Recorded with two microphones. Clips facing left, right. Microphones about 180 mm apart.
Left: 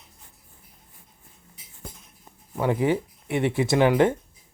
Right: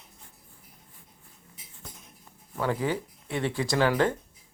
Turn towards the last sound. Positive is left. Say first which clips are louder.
# left 5 dB
turn(degrees=20)  # may be behind; listen again after turning